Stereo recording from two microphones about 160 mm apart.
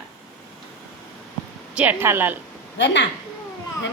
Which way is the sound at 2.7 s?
90° left.